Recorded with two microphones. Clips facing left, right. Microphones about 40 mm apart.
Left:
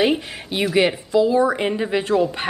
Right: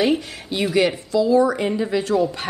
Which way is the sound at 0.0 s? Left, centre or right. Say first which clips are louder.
Even; left.